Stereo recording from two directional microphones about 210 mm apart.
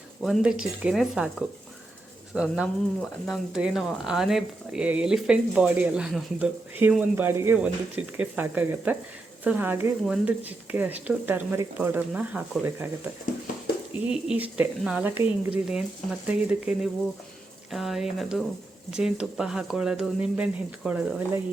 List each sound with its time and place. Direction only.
0.2 s speech: centre (ahead or behind)
14.1 s speech: 5° right (ahead or behind)